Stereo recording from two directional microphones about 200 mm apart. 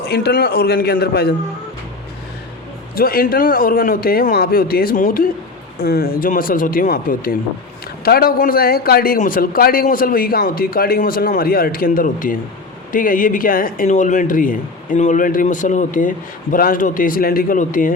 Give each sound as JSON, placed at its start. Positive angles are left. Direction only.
{"t": 0.1, "sound": "speech", "side_deg": 55}
{"t": 2.9, "sound": "speech", "side_deg": 50}